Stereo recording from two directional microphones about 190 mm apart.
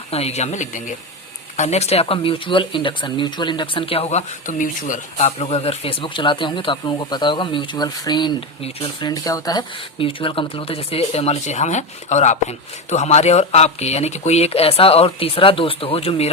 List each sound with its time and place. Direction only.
0.1 s speech: 35° left (ahead or behind)